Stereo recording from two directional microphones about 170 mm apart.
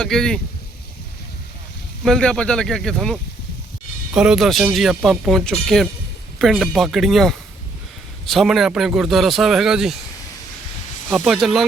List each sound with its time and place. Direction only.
0.0 s speech: 5° left (ahead or behind)
2.0 s speech: 5° left (ahead or behind)
11.1 s speech: centre (ahead or behind)